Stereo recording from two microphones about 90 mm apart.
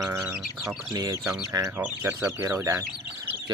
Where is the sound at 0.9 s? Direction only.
45° right (ahead or behind).